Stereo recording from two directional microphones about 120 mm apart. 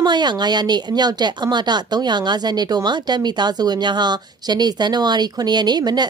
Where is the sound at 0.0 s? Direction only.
35° right (ahead or behind).